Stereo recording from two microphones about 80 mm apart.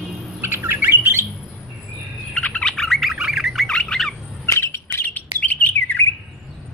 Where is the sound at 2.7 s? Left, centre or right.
Centre.